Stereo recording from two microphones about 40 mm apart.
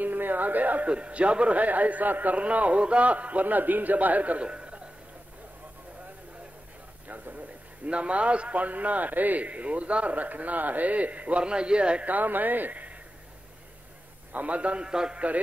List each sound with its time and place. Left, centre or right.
0.0 s a sound: right
0.8 s a man's voice: right
7.1 s a man's voice: right
12.1 s speech: right
14.3 s a man's voice: right
14.9 s a man's voice: centre